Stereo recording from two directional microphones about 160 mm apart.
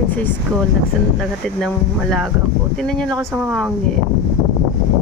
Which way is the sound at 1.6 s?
Centre (ahead or behind).